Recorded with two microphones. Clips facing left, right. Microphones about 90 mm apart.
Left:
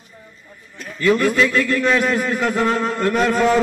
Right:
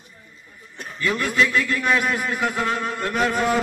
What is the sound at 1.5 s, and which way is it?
A man's voice, 10° right (ahead or behind).